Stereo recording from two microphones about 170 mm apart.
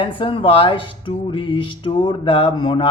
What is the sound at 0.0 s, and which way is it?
Speech, 30° left (ahead or behind).